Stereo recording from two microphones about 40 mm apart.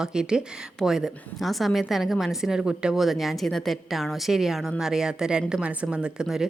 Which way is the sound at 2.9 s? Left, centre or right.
Centre.